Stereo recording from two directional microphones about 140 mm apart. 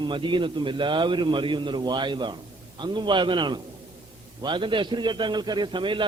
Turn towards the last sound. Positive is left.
turn(degrees=-35)  # may be behind; listen again after turning